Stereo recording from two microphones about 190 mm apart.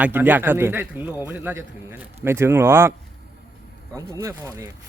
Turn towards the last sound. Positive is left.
turn(degrees=-15)  # may be behind; listen again after turning